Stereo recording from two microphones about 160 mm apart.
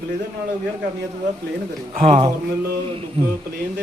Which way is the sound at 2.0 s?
45° right (ahead or behind).